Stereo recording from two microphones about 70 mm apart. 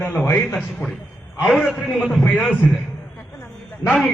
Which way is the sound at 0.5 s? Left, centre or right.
Centre.